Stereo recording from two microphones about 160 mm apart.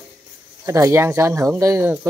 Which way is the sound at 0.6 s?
20° right (ahead or behind).